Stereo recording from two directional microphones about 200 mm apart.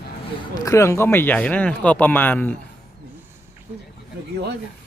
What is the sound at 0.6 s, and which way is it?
Speech, 15° left (ahead or behind).